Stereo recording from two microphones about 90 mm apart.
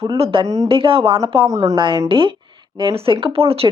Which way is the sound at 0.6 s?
75° right (ahead or behind).